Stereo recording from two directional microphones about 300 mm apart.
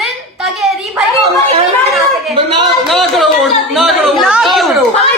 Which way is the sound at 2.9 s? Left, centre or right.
Centre.